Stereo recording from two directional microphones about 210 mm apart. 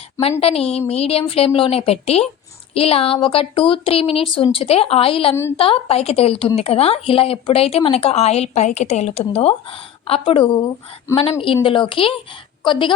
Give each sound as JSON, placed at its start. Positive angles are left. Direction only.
{"t": 0.2, "sound": "speech", "side_deg": 30}
{"t": 5.3, "sound": "a woman's voice", "side_deg": 10}
{"t": 5.5, "sound": "speech", "side_deg": 25}